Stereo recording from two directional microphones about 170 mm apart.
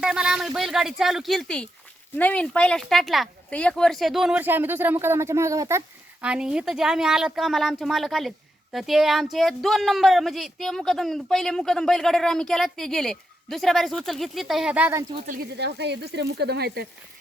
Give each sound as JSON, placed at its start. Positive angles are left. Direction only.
{"t": 0.0, "sound": "a woman's voice", "side_deg": -5}
{"t": 6.2, "sound": "a woman's voice", "side_deg": -5}
{"t": 15.3, "sound": "speech", "side_deg": -70}